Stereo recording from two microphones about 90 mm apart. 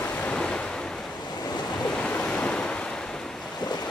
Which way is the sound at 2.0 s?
10° left (ahead or behind).